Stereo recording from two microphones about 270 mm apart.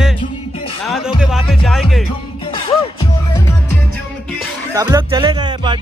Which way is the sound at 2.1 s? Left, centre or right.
Centre.